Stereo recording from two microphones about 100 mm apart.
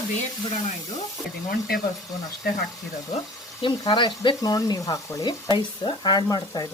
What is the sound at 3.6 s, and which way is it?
Speech, 50° left (ahead or behind).